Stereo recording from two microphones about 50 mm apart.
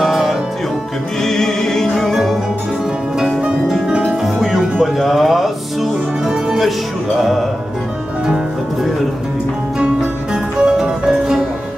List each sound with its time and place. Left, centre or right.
0.0 s music: centre
1.2 s music: centre
3.2 s music: centre
10.3 s music: centre